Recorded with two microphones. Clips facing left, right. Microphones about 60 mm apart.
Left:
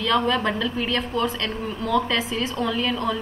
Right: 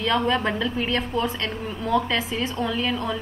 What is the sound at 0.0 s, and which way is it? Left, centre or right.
A woman's voice, centre.